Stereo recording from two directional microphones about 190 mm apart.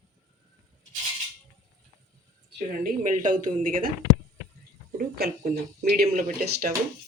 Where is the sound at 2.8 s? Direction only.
45° right (ahead or behind).